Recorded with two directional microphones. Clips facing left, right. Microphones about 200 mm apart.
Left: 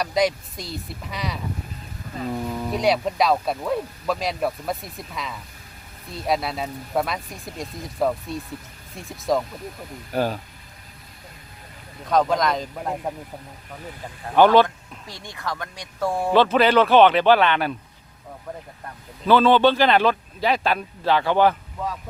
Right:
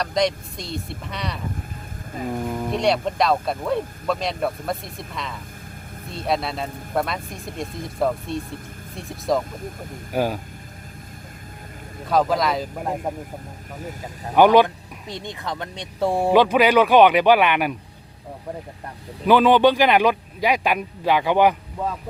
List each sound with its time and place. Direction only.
0.0 s speech: 5° left (ahead or behind)
2.1 s speech: 15° right (ahead or behind)
2.6 s speech: centre (ahead or behind)
10.1 s speech: 10° right (ahead or behind)
12.0 s speech: 5° right (ahead or behind)
14.3 s speech: 15° right (ahead or behind); by 16.3 s 30° right (ahead or behind)
16.3 s speech: 15° right (ahead or behind)
19.2 s speech: 15° right (ahead or behind)